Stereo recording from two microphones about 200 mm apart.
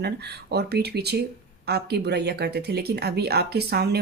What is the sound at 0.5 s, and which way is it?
Speech, 55° right (ahead or behind).